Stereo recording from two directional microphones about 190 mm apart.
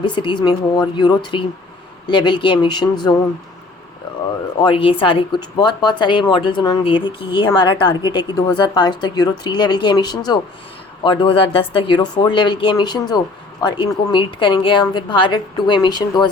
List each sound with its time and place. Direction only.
0.0 s speech: 25° left (ahead or behind)
4.6 s speech: 25° left (ahead or behind)